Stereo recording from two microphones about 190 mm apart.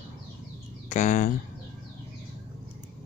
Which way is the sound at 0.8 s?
40° left (ahead or behind).